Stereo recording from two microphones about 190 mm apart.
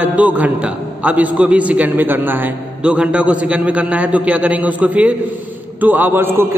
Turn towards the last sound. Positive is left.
turn(degrees=-10)  # may be behind; listen again after turning